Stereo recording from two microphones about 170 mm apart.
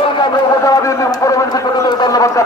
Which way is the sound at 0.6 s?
20° left (ahead or behind).